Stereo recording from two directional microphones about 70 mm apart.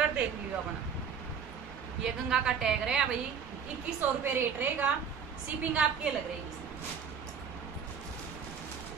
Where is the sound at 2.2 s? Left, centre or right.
Centre.